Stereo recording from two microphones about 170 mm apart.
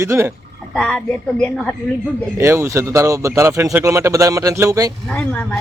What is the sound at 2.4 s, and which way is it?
Speech, 15° right (ahead or behind).